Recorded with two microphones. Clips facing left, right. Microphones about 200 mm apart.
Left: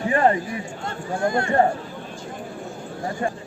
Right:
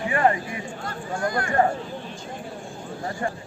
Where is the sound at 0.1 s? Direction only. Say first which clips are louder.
Left 2 dB; 35° left (ahead or behind).